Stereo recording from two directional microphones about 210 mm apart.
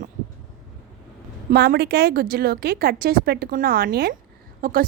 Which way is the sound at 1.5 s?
50° right (ahead or behind).